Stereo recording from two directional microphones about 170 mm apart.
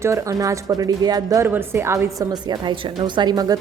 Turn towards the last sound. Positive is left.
turn(degrees=-25)  # may be behind; listen again after turning